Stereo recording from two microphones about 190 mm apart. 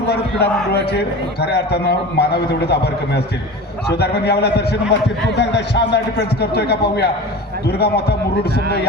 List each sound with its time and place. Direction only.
0.1 s a man's voice: 60° left (ahead or behind)